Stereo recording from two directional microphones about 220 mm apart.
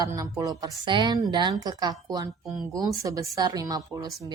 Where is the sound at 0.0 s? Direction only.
15° right (ahead or behind).